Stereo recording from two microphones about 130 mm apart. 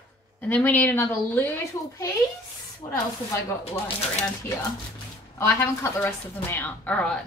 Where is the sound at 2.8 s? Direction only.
30° left (ahead or behind).